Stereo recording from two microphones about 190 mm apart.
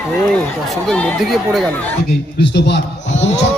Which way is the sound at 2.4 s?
65° left (ahead or behind).